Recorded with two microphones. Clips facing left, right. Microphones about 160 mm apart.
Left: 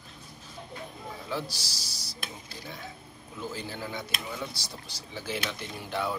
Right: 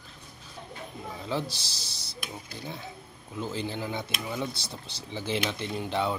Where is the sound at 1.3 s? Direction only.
25° right (ahead or behind).